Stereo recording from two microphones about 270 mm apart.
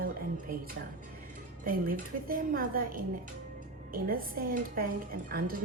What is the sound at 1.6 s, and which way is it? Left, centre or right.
A woman's voice, right.